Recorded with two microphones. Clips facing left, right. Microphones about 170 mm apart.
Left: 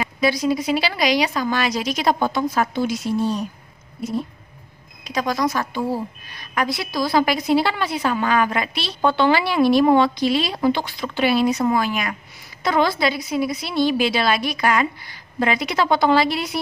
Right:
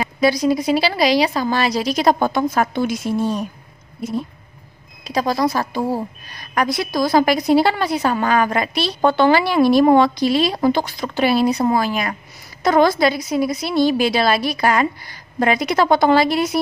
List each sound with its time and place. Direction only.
0.0 s a woman's voice: 40° right (ahead or behind)
5.0 s a woman's voice: 35° right (ahead or behind)